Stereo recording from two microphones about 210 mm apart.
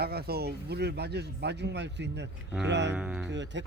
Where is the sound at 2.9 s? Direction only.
5° right (ahead or behind).